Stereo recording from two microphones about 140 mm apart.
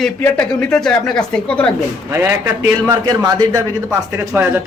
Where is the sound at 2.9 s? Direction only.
30° right (ahead or behind).